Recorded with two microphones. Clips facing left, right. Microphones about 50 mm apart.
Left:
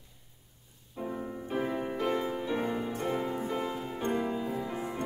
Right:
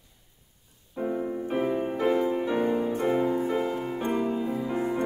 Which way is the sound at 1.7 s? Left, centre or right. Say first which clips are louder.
Right 6 dB; centre.